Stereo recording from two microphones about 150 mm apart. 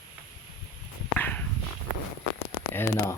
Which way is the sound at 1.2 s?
10° left (ahead or behind).